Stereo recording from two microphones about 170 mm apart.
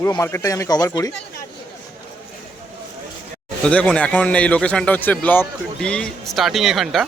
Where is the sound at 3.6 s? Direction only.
5° left (ahead or behind).